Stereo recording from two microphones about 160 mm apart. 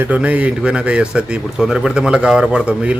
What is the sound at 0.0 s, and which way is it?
Speech, 10° right (ahead or behind).